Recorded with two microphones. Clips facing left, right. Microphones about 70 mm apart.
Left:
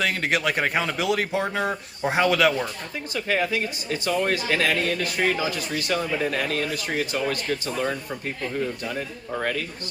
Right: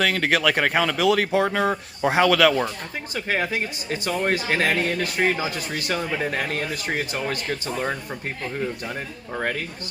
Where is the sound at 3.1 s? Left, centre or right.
Right.